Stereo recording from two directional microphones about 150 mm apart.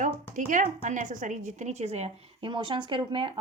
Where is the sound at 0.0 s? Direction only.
60° right (ahead or behind).